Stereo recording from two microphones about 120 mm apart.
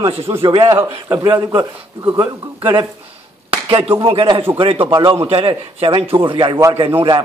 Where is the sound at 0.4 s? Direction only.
45° right (ahead or behind).